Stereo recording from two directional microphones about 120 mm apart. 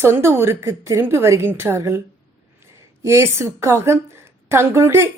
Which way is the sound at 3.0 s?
25° right (ahead or behind).